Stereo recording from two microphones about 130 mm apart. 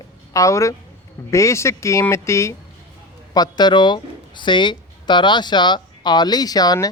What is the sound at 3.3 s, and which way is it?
Speech, 35° left (ahead or behind).